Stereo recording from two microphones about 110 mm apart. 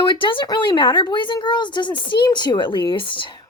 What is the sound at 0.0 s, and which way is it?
A woman's voice, 50° left (ahead or behind).